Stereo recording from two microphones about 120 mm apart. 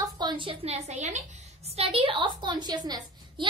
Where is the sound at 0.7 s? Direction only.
65° right (ahead or behind).